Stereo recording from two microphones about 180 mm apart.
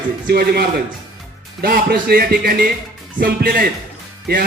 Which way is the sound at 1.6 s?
60° right (ahead or behind).